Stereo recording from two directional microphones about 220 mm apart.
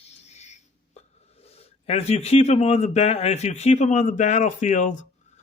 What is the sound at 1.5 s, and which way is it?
A man's voice, 30° left (ahead or behind).